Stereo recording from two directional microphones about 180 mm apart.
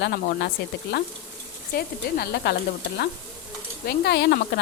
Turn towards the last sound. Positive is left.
turn(degrees=65)  # may be behind; listen again after turning